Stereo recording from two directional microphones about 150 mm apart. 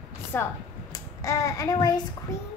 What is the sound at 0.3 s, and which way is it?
A child's voice, 15° left (ahead or behind).